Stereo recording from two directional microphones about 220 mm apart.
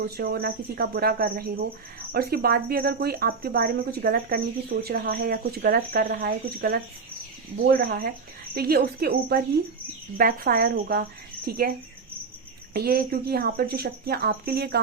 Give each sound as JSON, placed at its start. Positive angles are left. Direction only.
{"t": 0.0, "sound": "speech", "side_deg": -45}
{"t": 12.7, "sound": "speech", "side_deg": -45}